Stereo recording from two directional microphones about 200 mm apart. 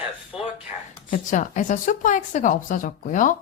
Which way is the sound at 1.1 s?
40° left (ahead or behind).